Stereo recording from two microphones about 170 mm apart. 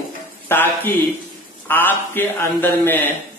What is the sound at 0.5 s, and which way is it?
Speech, 10° left (ahead or behind).